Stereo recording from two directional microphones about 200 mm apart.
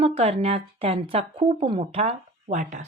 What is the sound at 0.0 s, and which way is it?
Speech, 30° right (ahead or behind).